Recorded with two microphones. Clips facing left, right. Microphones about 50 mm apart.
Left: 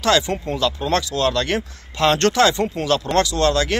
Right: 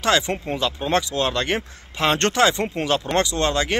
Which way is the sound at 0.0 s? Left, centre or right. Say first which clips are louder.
Left 2 dB; right.